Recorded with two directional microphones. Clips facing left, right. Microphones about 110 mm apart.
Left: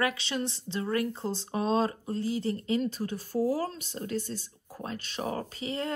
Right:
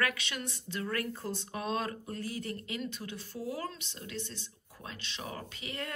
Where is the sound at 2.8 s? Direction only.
40° left (ahead or behind).